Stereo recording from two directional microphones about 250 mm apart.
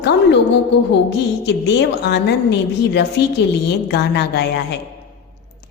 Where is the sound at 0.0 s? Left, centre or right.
Left.